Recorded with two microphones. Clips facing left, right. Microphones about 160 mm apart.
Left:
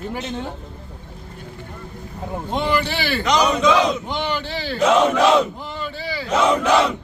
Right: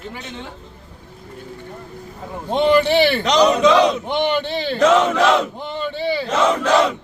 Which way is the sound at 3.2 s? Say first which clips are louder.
Right 3 dB; 35° right (ahead or behind).